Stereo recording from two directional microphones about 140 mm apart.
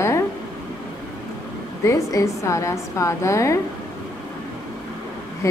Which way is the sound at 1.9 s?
20° left (ahead or behind).